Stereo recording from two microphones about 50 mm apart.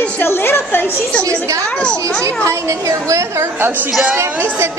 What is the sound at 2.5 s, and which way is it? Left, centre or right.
A woman's voice, right.